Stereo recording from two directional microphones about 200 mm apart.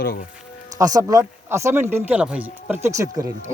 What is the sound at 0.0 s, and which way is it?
Speech, 45° left (ahead or behind).